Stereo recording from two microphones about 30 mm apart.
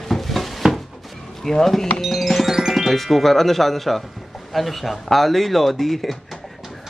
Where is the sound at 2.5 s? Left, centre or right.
Centre.